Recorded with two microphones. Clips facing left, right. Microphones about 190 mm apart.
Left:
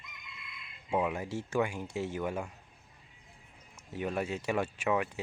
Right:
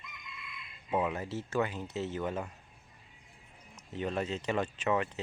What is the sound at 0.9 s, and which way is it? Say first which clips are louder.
Speech: left 1 dB; 10° left (ahead or behind).